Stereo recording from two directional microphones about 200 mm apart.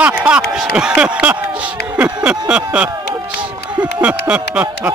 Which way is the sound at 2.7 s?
5° right (ahead or behind).